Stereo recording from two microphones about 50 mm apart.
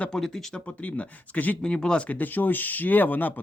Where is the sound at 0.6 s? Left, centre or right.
Left.